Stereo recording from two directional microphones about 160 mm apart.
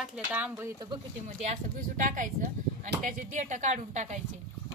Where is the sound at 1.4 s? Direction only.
55° right (ahead or behind).